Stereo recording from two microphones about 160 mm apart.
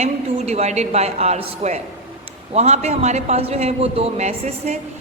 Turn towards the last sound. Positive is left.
turn(degrees=-45)  # may be behind; listen again after turning